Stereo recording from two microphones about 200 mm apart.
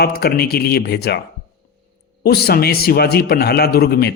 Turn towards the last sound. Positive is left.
turn(degrees=55)  # may be behind; listen again after turning